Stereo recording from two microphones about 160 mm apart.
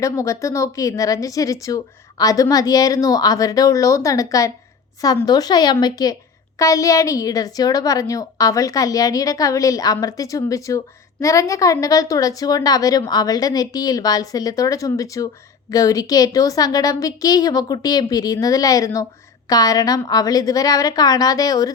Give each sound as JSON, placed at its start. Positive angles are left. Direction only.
{"t": 0.0, "sound": "speech", "side_deg": 20}